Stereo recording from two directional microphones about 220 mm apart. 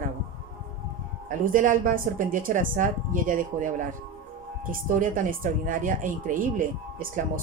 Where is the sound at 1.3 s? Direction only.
35° right (ahead or behind).